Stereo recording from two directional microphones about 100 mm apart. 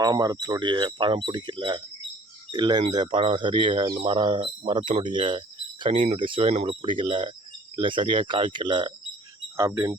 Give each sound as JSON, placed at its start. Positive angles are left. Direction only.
{"t": 0.0, "sound": "speech", "side_deg": -40}
{"t": 9.6, "sound": "speech", "side_deg": -30}